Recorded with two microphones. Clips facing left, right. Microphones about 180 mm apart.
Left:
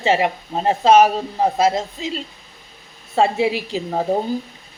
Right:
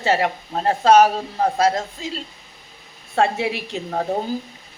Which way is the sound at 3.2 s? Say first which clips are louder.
Left 3 dB; centre (ahead or behind).